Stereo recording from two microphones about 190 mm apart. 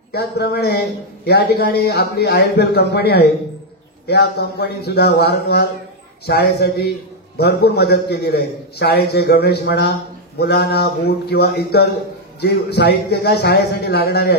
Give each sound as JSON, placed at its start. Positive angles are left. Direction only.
{"t": 0.1, "sound": "a man's voice", "side_deg": 60}